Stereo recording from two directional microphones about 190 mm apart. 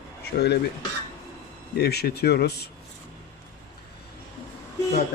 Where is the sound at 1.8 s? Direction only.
55° left (ahead or behind).